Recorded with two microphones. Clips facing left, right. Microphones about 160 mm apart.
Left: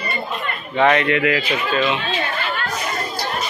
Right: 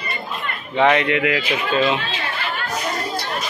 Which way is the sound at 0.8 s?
15° right (ahead or behind).